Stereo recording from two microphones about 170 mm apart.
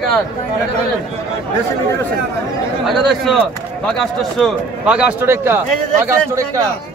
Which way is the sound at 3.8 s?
5° left (ahead or behind).